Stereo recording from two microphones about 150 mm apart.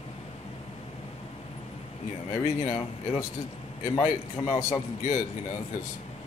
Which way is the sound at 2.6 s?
25° left (ahead or behind).